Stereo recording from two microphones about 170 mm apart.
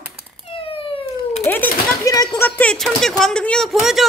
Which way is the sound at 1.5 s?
10° left (ahead or behind).